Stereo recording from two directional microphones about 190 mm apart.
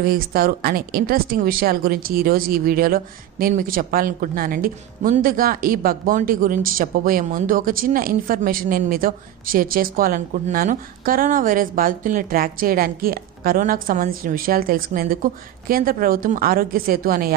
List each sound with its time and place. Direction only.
0.0 s a woman's voice: 50° right (ahead or behind)